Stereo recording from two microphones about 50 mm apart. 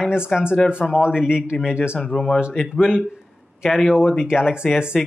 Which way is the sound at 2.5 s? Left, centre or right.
Centre.